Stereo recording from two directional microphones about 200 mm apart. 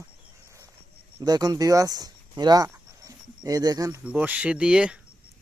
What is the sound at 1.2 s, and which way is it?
Speech, 20° right (ahead or behind).